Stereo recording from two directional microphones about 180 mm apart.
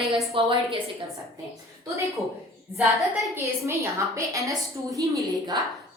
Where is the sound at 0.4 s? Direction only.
30° right (ahead or behind).